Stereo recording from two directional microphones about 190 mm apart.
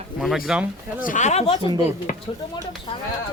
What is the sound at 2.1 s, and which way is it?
Speech, 45° left (ahead or behind).